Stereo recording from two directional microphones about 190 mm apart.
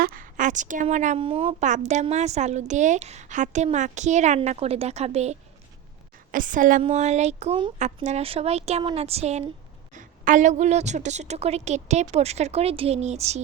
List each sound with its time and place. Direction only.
0.0 s a woman's voice: 45° right (ahead or behind)
6.3 s a woman's voice: 45° right (ahead or behind)